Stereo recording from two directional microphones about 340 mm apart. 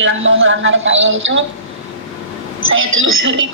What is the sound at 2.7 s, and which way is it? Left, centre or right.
Speech, right.